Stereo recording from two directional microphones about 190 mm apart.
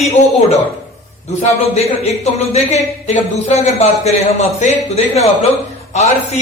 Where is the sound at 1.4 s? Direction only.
35° left (ahead or behind).